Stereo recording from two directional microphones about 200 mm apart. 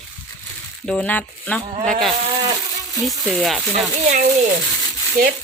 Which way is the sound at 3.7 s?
40° right (ahead or behind).